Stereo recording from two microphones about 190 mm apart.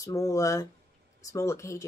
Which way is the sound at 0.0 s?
15° left (ahead or behind).